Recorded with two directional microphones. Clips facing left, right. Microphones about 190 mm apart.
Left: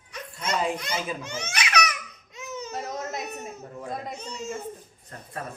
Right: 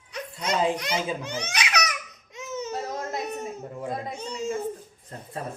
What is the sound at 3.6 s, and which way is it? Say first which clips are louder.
Speech: right 3 dB; 10° right (ahead or behind).